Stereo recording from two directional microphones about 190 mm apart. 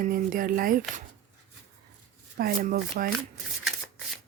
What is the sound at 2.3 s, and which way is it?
Speech, 50° right (ahead or behind).